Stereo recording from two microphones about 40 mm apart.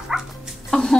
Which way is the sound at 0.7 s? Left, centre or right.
Centre.